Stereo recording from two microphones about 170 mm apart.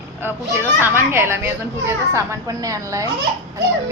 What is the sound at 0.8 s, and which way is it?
A woman's voice, 15° right (ahead or behind).